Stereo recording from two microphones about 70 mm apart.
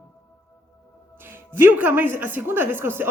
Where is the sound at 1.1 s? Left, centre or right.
Right.